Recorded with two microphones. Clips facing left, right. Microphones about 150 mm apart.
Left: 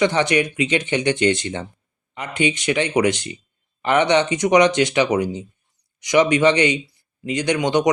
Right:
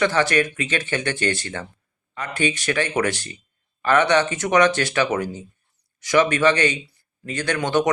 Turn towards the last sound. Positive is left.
turn(degrees=15)  # may be behind; listen again after turning